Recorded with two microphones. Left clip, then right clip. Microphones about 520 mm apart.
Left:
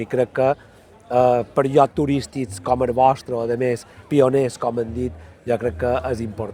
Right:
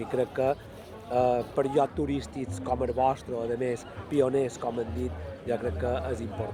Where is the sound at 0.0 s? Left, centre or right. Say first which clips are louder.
Left 8 dB; left.